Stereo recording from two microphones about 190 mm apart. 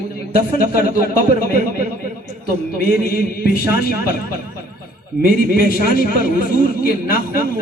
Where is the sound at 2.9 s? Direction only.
50° left (ahead or behind).